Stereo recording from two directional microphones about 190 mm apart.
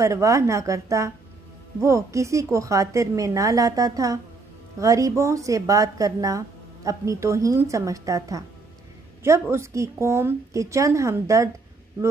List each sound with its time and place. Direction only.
0.0 s a woman's voice: 15° right (ahead or behind)